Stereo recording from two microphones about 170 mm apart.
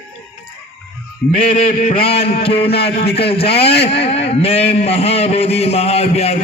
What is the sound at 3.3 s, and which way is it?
A man's voice, 35° left (ahead or behind).